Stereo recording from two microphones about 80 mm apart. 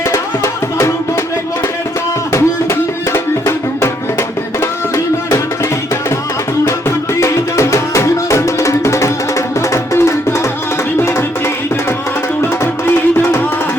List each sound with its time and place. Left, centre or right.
0.1 s music: left
2.3 s music: left
7.2 s music: left
12.4 s music: left